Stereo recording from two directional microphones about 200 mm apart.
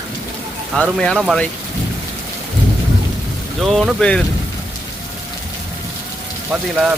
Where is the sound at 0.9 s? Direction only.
5° left (ahead or behind).